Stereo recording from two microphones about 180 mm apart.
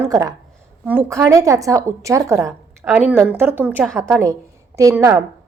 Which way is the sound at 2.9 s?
5° right (ahead or behind).